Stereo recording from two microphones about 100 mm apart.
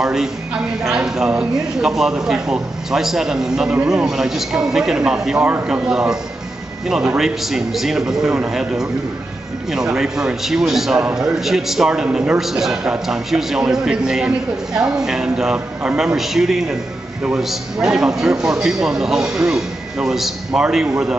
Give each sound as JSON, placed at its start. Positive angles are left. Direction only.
{"t": 0.0, "sound": "speech", "side_deg": -5}
{"t": 7.2, "sound": "a man's voice", "side_deg": -5}